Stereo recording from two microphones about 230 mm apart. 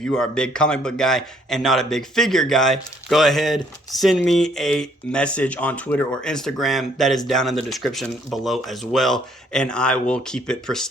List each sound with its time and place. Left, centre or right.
0.0 s speech: centre